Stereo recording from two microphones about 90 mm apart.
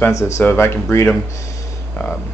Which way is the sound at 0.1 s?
30° left (ahead or behind).